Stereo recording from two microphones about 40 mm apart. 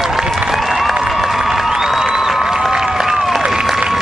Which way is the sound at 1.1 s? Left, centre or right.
Centre.